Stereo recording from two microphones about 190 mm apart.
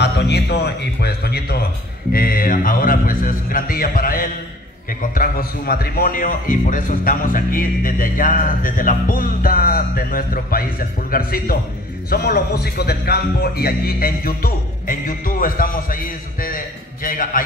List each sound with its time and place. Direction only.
0.0 s a man's voice: 60° left (ahead or behind)